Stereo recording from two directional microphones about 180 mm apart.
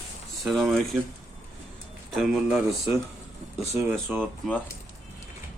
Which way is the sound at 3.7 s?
10° right (ahead or behind).